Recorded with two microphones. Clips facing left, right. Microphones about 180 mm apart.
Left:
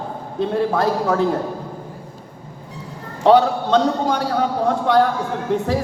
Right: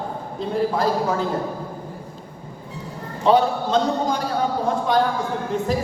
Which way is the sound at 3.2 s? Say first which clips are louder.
Left 4 dB; 70° left (ahead or behind).